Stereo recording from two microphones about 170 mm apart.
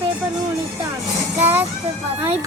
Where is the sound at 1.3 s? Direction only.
10° right (ahead or behind).